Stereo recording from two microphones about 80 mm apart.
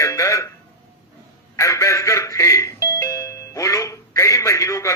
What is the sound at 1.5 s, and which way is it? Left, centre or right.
Speech, left.